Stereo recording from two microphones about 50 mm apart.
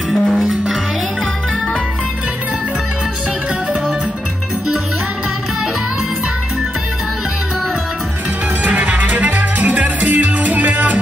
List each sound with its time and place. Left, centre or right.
0.1 s music: centre
8.6 s music: right